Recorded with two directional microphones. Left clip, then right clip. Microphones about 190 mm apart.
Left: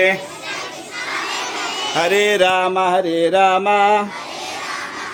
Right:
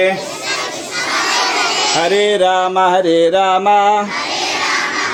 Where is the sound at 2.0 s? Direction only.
10° right (ahead or behind); by 4.0 s 5° left (ahead or behind).